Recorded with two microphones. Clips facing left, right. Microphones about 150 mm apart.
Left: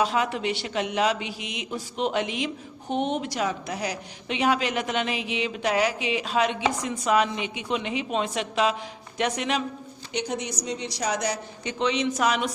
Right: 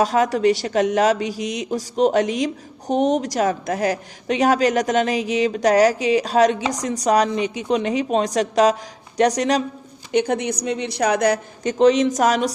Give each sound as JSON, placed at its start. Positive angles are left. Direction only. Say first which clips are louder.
{"t": 0.0, "sound": "speech", "louder": "right 8 dB", "side_deg": -40}
{"t": 10.1, "sound": "a woman's voice", "louder": "right 10 dB", "side_deg": -55}